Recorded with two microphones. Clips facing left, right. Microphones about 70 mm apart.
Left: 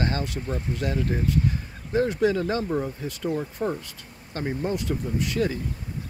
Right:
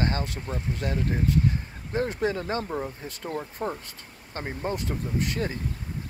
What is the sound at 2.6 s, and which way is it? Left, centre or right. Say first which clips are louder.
Speech: left 4 dB; centre.